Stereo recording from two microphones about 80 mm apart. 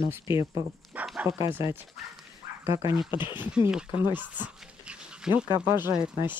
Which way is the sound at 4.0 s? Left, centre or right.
Right.